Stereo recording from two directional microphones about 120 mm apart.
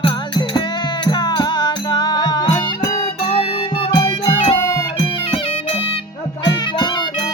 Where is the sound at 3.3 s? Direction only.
50° left (ahead or behind).